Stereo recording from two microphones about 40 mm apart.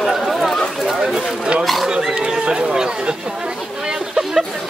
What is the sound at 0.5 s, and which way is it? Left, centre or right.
Chatter, centre.